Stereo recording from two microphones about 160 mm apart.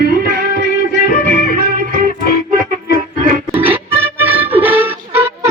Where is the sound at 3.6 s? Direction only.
10° right (ahead or behind).